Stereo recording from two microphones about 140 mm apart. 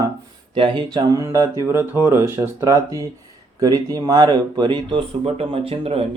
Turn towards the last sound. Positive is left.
turn(degrees=-45)  # may be behind; listen again after turning